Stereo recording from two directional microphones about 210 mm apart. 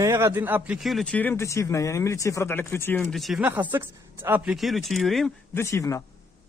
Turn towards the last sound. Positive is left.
turn(degrees=15)  # may be behind; listen again after turning